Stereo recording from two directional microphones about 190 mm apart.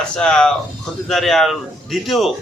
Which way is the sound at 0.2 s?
5° left (ahead or behind).